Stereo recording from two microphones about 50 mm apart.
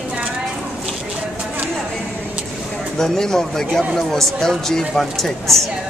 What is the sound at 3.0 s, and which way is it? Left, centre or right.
Speech, centre.